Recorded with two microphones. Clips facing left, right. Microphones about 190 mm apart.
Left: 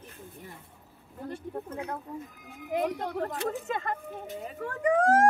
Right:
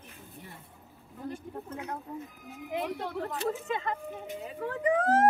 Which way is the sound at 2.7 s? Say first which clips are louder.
Left 4 dB; 45° left (ahead or behind).